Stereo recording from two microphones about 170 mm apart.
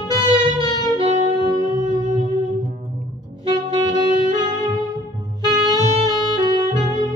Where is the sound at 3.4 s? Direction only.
25° right (ahead or behind).